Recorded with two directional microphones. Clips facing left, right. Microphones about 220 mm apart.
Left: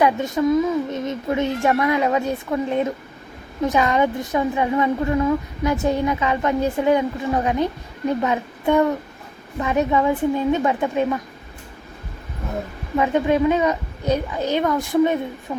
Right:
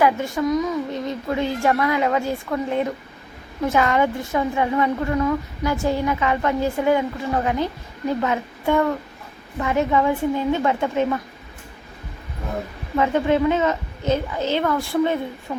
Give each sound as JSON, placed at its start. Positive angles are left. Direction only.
{"t": 0.0, "sound": "a woman's voice", "side_deg": 20}
{"t": 13.0, "sound": "a child's voice", "side_deg": 15}